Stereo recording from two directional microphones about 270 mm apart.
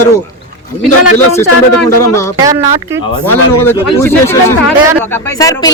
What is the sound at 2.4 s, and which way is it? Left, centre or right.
Speech, centre.